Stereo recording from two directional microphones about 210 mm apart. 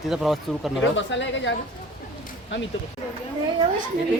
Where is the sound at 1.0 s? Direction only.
60° left (ahead or behind).